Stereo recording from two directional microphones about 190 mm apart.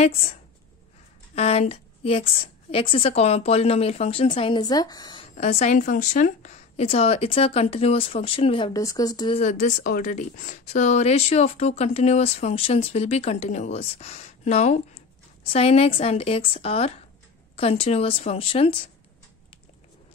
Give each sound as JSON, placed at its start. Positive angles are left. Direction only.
{"t": 1.3, "sound": "a woman's voice", "side_deg": 35}
{"t": 5.4, "sound": "speech", "side_deg": 35}
{"t": 8.7, "sound": "a woman's voice", "side_deg": 20}
{"t": 9.4, "sound": "speech", "side_deg": 40}